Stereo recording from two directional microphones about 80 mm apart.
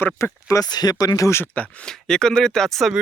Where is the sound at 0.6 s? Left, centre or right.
Left.